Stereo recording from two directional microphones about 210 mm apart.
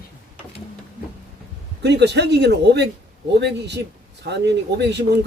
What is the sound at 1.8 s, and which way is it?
Speech, 55° right (ahead or behind).